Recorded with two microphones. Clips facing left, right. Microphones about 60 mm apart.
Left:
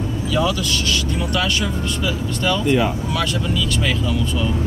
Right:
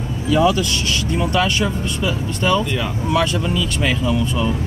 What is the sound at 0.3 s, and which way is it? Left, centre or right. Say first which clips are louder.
Speech: right 5 dB; right.